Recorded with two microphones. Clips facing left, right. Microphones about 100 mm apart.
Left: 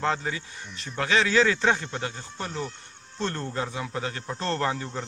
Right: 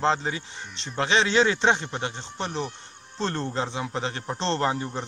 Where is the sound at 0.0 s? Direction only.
25° right (ahead or behind).